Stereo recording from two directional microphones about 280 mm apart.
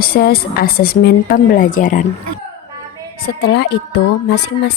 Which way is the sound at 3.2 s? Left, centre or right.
Left.